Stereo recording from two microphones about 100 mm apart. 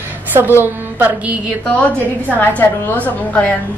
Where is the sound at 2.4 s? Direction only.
15° left (ahead or behind).